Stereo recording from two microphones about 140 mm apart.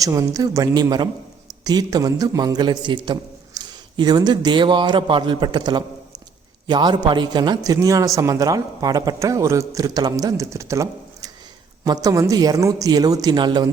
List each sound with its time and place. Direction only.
0.0 s a man's voice: 25° right (ahead or behind)